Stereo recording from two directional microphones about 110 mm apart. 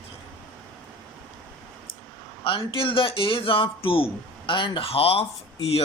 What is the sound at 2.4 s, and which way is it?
Speech, 55° left (ahead or behind).